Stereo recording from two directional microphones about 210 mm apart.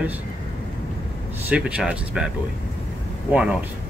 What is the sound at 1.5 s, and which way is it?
Speech, 5° right (ahead or behind).